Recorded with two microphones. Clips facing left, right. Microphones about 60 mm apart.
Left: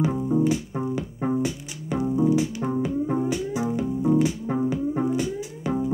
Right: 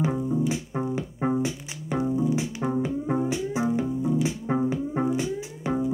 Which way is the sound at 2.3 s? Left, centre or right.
Right.